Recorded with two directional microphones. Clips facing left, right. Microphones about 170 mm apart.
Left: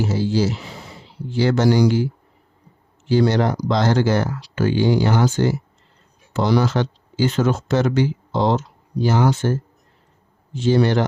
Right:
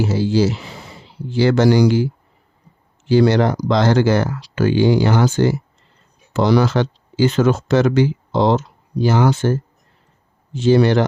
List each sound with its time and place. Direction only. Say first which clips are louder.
0.0 s speech: right 3 dB; 90° right
3.1 s speech: right 3 dB; 90° right